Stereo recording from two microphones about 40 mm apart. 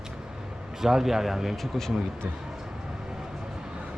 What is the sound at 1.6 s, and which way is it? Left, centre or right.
Speech, centre.